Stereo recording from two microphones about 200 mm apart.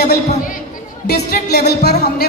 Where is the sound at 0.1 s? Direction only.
45° left (ahead or behind).